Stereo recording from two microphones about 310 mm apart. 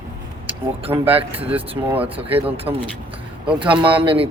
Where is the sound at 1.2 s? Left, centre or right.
Centre.